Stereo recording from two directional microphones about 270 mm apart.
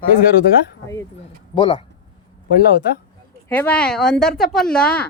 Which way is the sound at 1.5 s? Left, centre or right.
Centre.